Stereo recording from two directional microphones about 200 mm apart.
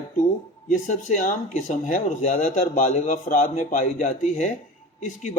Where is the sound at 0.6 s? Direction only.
40° left (ahead or behind).